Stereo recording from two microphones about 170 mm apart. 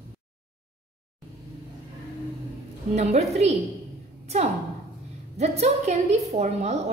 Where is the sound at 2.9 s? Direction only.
40° right (ahead or behind).